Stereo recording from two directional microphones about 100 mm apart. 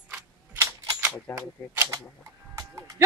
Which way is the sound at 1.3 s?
25° right (ahead or behind).